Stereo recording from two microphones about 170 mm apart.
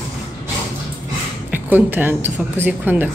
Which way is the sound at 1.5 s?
10° right (ahead or behind).